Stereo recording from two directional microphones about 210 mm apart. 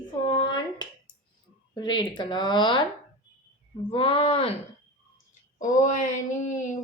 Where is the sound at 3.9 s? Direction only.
25° left (ahead or behind).